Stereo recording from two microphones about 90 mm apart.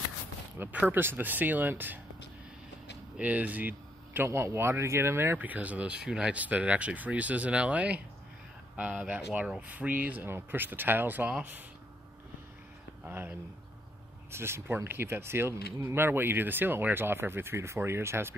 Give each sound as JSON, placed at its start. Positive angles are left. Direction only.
{"t": 0.6, "sound": "speech", "side_deg": -20}
{"t": 3.2, "sound": "speech", "side_deg": -15}
{"t": 13.0, "sound": "speech", "side_deg": -20}